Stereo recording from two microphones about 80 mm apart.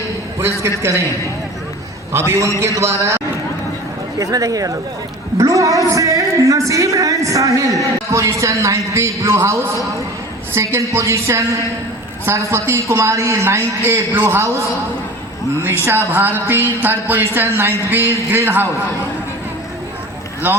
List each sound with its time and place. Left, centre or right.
0.6 s a man's voice: right
2.1 s a man's voice: right
4.2 s a man's voice: right
20.4 s a woman's voice: right